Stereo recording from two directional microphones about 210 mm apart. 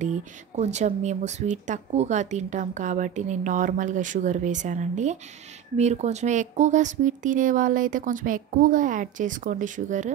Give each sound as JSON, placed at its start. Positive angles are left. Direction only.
{"t": 0.0, "sound": "speech", "side_deg": -35}